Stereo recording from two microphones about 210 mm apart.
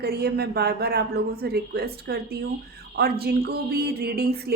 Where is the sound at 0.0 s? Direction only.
50° right (ahead or behind).